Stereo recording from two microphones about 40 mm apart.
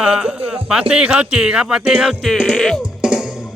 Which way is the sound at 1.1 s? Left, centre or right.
Right.